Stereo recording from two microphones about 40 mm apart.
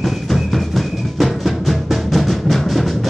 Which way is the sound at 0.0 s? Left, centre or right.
Centre.